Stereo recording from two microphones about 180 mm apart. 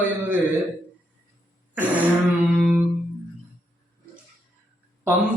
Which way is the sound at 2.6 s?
5° right (ahead or behind).